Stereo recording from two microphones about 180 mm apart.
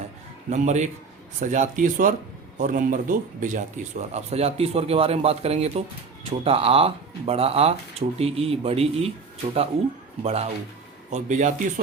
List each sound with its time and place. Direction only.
0.5 s speech: 40° right (ahead or behind)
10.2 s speech: 35° right (ahead or behind)